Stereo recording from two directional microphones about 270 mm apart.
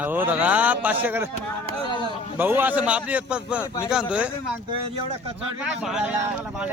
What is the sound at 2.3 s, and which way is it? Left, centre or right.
A man's voice, centre.